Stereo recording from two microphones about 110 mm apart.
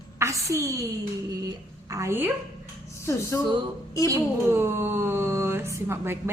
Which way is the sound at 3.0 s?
25° left (ahead or behind).